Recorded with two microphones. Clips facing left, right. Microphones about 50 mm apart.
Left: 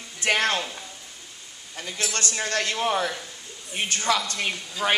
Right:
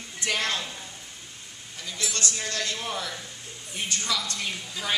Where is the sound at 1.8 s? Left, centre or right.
Left.